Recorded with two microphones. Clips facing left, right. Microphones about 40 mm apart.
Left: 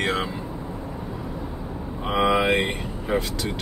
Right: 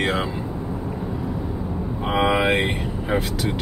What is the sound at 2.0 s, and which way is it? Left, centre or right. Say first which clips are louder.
Speech: right 1 dB; centre.